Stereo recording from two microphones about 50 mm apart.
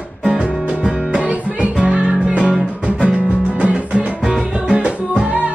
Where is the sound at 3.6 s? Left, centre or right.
Right.